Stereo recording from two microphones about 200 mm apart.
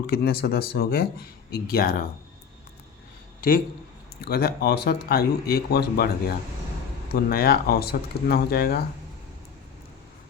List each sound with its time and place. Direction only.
0.1 s speech: 50° left (ahead or behind)
3.4 s speech: 45° left (ahead or behind)